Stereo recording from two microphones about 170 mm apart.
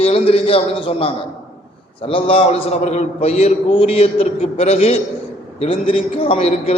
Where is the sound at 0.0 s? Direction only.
35° left (ahead or behind).